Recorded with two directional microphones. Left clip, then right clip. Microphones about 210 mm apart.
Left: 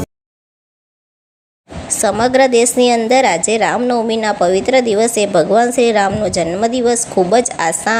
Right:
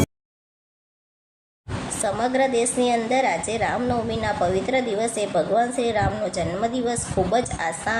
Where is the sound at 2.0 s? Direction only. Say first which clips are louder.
Left 10 dB; 40° left (ahead or behind).